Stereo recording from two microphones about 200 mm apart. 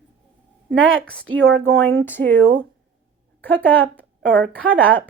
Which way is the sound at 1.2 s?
90° right.